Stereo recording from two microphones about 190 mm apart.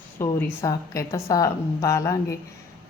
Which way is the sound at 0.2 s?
15° left (ahead or behind).